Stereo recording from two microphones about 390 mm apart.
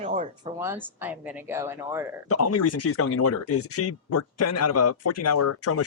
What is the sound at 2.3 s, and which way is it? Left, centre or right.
Speech, left.